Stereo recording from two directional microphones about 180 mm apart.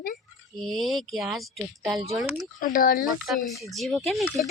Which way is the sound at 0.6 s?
Centre (ahead or behind).